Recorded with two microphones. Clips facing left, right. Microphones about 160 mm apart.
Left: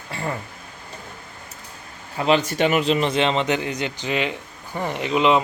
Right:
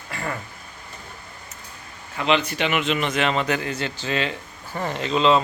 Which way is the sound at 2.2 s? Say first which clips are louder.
Left 3 dB; 40° left (ahead or behind).